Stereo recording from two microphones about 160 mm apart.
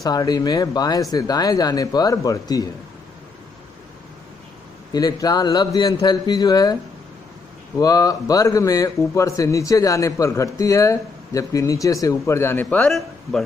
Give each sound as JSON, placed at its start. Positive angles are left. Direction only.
{"t": 0.0, "sound": "a man's voice", "side_deg": 25}
{"t": 4.9, "sound": "a man's voice", "side_deg": 25}
{"t": 7.8, "sound": "a man's voice", "side_deg": 20}
{"t": 12.6, "sound": "a man's voice", "side_deg": 5}